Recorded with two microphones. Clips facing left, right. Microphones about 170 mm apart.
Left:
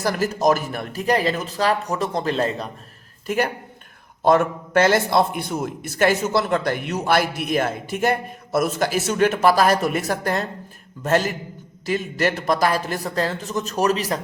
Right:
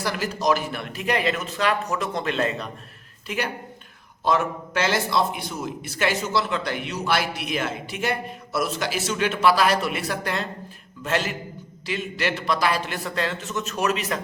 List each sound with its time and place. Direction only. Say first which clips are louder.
0.0 s speech: left 5 dB; 45° left (ahead or behind)
3.2 s a man's voice: left 6 dB; 45° left (ahead or behind)